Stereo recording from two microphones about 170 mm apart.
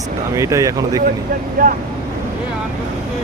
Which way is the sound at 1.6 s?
50° right (ahead or behind).